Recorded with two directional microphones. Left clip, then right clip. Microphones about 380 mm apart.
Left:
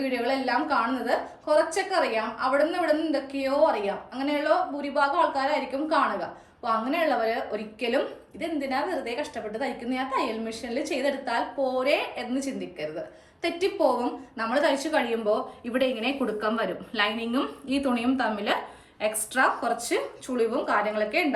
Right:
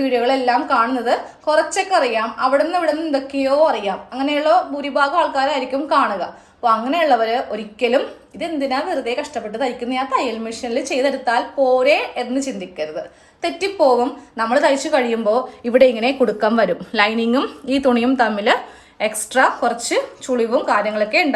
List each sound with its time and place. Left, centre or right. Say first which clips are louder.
0.0 s a woman's voice: right 10 dB; centre
14.3 s a woman's voice: right 9 dB; centre